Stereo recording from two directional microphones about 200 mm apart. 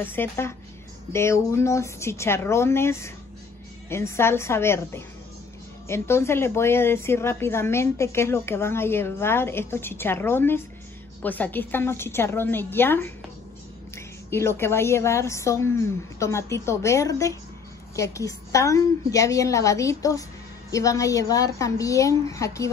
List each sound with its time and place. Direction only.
0.0 s speech: 10° left (ahead or behind)